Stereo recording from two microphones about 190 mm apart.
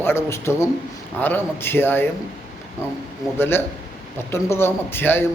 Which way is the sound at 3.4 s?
10° left (ahead or behind).